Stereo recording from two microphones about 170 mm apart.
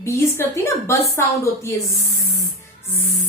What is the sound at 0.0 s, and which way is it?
A woman's voice, 15° left (ahead or behind).